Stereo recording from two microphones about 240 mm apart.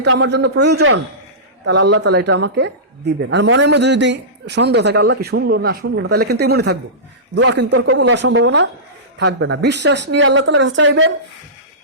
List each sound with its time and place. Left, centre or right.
0.0 s a woman's voice: right